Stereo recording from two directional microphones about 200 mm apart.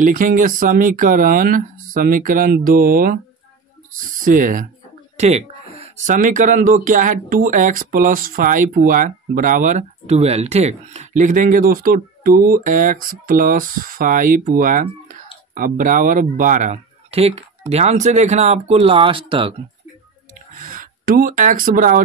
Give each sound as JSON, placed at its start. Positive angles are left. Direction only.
{"t": 0.0, "sound": "speech", "side_deg": -40}
{"t": 4.2, "sound": "speech", "side_deg": -40}
{"t": 5.1, "sound": "speech", "side_deg": -30}
{"t": 20.5, "sound": "speech", "side_deg": -45}